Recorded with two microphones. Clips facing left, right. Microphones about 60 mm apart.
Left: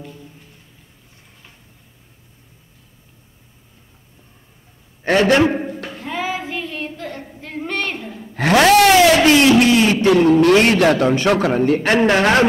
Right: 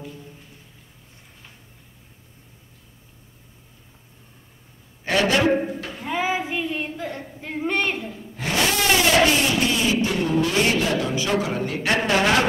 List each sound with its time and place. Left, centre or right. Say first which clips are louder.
5.0 s a man's voice: left 6 dB; left
5.9 s child singing: right 1 dB; centre
7.4 s a woman's voice: right 1 dB; centre
8.0 s a sound: left 8 dB; left
10.0 s a man's voice: left 10 dB; left